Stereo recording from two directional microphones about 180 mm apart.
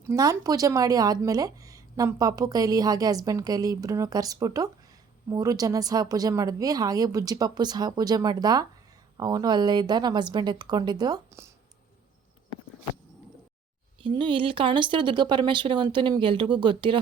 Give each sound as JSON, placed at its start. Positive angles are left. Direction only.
{"t": 0.0, "sound": "speech", "side_deg": -20}
{"t": 14.0, "sound": "speech", "side_deg": -25}